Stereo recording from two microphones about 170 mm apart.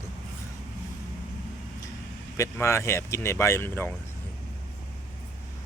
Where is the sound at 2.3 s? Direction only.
15° left (ahead or behind).